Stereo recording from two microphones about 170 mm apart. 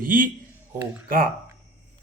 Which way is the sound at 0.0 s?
55° right (ahead or behind).